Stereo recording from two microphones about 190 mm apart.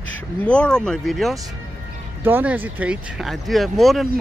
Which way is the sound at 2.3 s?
10° right (ahead or behind).